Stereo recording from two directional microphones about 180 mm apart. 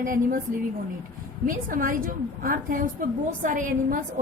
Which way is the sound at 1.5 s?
50° right (ahead or behind).